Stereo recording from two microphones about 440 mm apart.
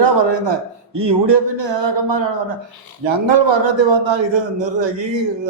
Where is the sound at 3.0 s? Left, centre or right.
Right.